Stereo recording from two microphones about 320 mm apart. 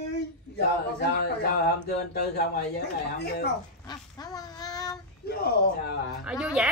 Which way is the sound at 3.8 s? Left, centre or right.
Centre.